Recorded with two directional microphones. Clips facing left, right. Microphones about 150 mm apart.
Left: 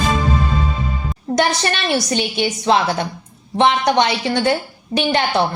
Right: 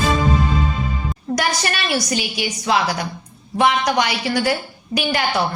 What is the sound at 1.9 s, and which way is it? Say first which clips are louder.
A woman's voice: left 3 dB; 30° left (ahead or behind).